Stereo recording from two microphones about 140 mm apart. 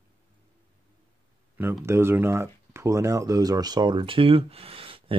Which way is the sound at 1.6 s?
15° right (ahead or behind).